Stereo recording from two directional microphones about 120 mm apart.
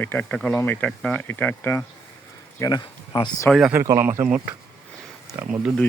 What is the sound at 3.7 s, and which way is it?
Speech, 25° right (ahead or behind).